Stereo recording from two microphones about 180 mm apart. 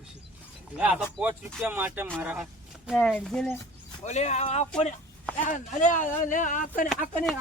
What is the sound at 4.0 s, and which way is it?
Speech, 40° left (ahead or behind).